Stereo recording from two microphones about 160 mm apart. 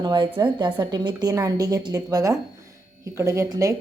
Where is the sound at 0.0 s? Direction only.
30° right (ahead or behind).